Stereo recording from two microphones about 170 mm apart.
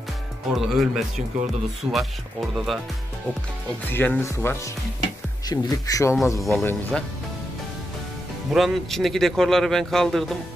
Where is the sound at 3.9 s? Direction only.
10° left (ahead or behind).